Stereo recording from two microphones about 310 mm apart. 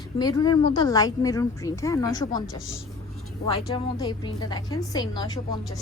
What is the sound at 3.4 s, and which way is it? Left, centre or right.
Speech, centre.